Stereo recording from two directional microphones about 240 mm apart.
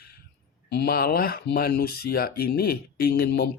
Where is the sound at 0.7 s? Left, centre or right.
Left.